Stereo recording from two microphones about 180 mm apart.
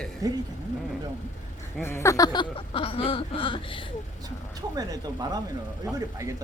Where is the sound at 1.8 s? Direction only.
15° left (ahead or behind).